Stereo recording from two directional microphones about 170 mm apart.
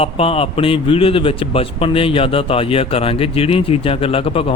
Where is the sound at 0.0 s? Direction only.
35° left (ahead or behind).